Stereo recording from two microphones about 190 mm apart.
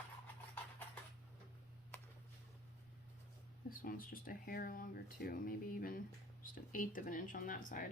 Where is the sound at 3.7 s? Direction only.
50° left (ahead or behind).